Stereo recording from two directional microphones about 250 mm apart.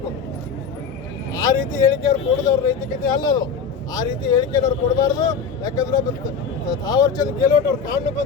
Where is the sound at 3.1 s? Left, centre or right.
Centre.